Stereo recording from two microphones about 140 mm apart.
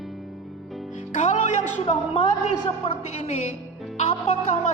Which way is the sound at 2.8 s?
55° left (ahead or behind).